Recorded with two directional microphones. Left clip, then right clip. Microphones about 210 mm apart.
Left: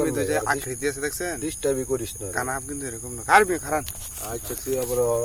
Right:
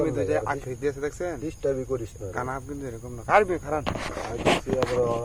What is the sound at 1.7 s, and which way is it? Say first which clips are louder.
Speech: left 3 dB; 45° left (ahead or behind).